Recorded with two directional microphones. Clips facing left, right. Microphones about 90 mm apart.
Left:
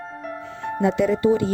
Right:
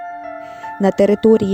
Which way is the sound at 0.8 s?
80° right.